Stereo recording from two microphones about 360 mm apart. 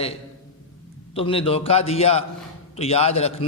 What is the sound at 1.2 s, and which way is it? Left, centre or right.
A man's voice, centre.